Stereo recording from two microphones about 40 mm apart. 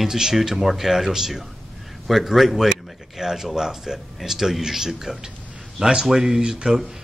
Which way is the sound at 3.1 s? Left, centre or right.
Centre.